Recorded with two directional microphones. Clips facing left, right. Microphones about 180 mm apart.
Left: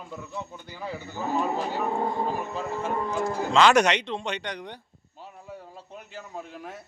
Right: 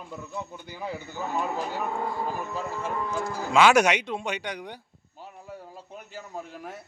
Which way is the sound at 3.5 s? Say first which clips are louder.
Right 1 dB; 5° right (ahead or behind).